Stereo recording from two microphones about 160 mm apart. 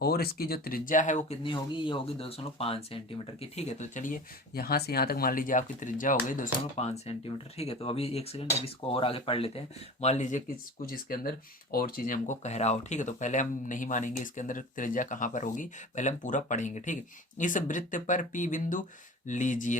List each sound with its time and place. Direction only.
0.0 s speech: 75° left (ahead or behind); by 1.4 s 50° left (ahead or behind)
1.5 s speech: 30° left (ahead or behind)
10.8 s speech: 60° left (ahead or behind)